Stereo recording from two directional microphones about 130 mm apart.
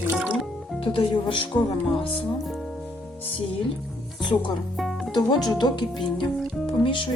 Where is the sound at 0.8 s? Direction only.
40° left (ahead or behind).